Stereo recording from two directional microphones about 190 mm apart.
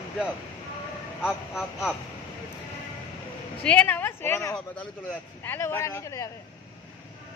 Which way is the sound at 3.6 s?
5° left (ahead or behind).